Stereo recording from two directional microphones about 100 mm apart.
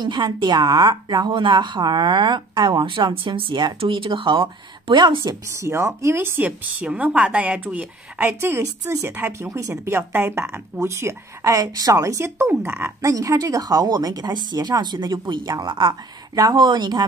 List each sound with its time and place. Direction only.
0.0 s a woman's voice: 50° right (ahead or behind)
5.3 s a woman's voice: 30° right (ahead or behind)
13.1 s a woman's voice: 35° right (ahead or behind); by 17.0 s 50° right (ahead or behind)